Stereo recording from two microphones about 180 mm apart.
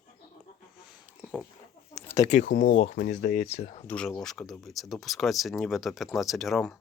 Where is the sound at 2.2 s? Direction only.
45° left (ahead or behind).